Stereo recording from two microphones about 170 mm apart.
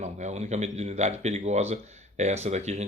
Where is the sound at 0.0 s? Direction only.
45° right (ahead or behind).